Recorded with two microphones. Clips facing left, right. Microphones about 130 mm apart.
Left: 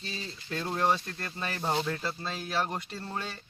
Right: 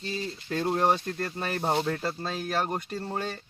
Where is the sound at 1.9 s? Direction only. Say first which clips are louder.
Right 4 dB; 45° right (ahead or behind).